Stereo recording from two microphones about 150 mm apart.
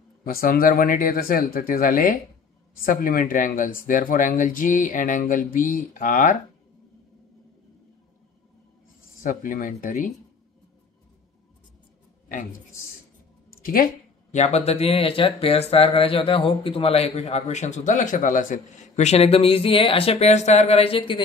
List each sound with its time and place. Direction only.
0.2 s speech: 75° left (ahead or behind)
9.2 s speech: 65° left (ahead or behind)
13.5 s a sound: 75° left (ahead or behind)
14.3 s speech: 45° left (ahead or behind)